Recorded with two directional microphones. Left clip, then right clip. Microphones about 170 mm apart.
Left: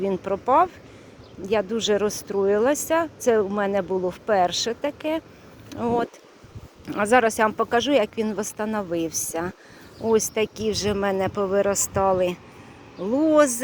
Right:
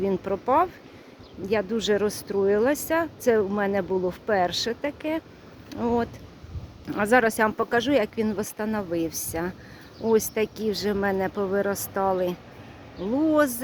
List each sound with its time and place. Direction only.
0.0 s speech: centre (ahead or behind)
10.6 s speech: 40° right (ahead or behind)
10.8 s speech: 5° left (ahead or behind)